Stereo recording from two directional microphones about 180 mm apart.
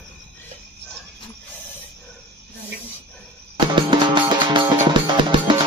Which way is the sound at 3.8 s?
25° right (ahead or behind).